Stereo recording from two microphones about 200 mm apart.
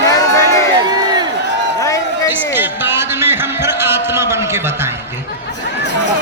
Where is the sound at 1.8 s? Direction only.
15° left (ahead or behind).